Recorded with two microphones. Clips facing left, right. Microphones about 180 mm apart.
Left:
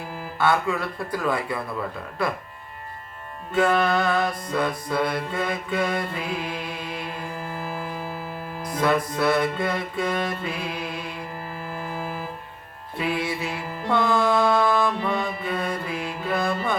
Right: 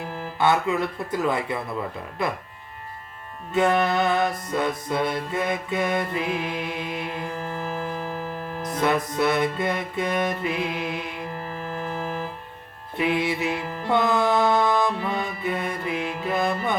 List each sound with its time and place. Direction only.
0.3 s music: 20° right (ahead or behind)
3.5 s music: 20° right (ahead or behind)
7.6 s music: 10° left (ahead or behind)
8.7 s music: 20° right (ahead or behind)
11.9 s music: 10° left (ahead or behind)
13.0 s music: 20° right (ahead or behind)